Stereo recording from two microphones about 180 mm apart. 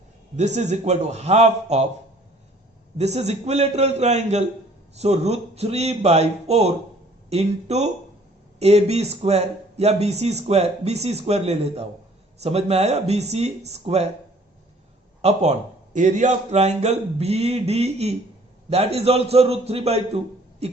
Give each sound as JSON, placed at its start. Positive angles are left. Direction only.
{"t": 0.3, "sound": "speech", "side_deg": -40}
{"t": 3.0, "sound": "speech", "side_deg": -35}
{"t": 15.2, "sound": "speech", "side_deg": -35}